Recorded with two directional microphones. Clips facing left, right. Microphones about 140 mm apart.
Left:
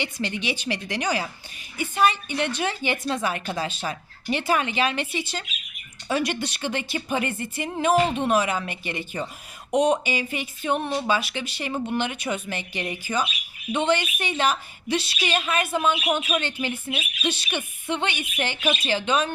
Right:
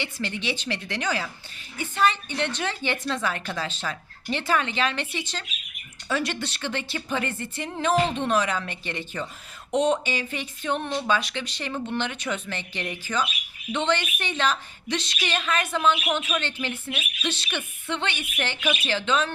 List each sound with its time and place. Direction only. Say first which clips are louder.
0.0 s a woman's voice: left 2 dB; 15° left (ahead or behind)